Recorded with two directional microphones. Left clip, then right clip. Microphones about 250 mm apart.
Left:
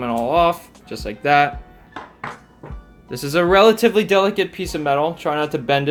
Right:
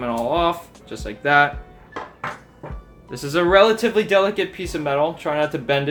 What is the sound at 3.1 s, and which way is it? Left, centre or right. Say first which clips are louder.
Speech: left 1 dB; left.